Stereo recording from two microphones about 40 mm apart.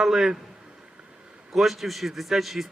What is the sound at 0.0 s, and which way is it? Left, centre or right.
Speech, centre.